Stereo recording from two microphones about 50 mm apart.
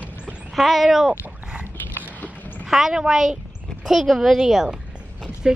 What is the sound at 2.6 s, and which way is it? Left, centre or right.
A woman's voice, centre.